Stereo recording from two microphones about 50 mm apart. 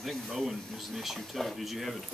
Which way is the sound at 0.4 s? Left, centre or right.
Centre.